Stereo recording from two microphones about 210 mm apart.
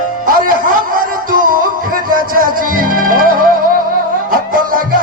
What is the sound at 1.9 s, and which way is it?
Music, 40° right (ahead or behind).